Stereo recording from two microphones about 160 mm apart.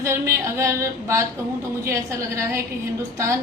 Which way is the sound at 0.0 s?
15° right (ahead or behind).